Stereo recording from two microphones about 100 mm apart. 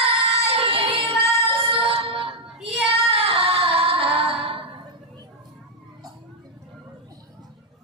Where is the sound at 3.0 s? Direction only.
70° right (ahead or behind).